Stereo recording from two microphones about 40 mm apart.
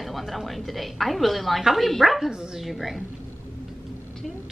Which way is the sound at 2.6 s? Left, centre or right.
Centre.